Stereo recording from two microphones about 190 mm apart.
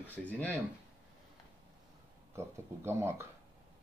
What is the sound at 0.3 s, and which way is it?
Speech, 10° left (ahead or behind).